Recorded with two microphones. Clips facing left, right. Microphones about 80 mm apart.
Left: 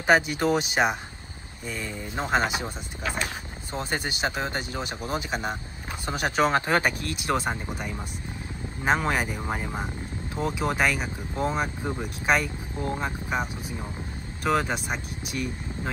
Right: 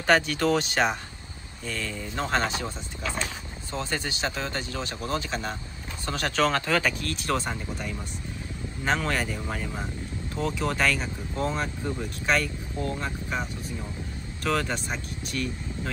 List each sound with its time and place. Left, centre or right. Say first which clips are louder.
0.0 s speech: left 1 dB; centre
3.7 s speech: left 1 dB; centre
8.8 s speech: left 2 dB; centre
9.5 s speech: left 2 dB; left
10.3 s speech: left 1 dB; centre